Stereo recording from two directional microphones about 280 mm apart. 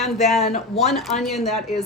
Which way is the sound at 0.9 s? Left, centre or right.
Centre.